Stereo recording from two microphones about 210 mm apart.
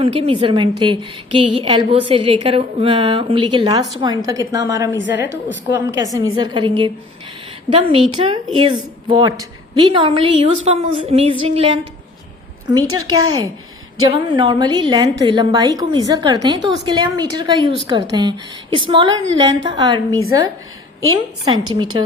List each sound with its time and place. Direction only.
0.0 s a woman's voice: 25° right (ahead or behind)
21.2 s a woman's voice: 20° right (ahead or behind)